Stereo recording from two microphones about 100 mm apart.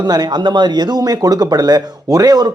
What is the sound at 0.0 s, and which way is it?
Speech, 45° right (ahead or behind).